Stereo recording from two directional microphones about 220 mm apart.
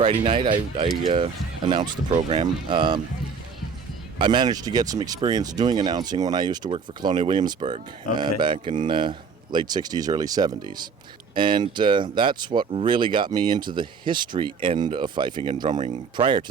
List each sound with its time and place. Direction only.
0.0 s speech: 25° right (ahead or behind)
4.2 s speech: 20° right (ahead or behind)